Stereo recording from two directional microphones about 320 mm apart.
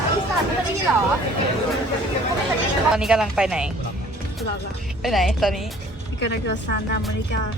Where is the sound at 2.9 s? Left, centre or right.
Centre.